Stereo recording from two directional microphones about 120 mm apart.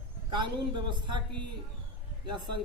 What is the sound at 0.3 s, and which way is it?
Speech, 40° right (ahead or behind).